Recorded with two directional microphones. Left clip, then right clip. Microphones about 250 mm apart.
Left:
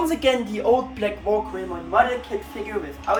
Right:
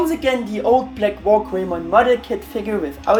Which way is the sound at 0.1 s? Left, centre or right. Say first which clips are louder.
Right 1 dB; centre.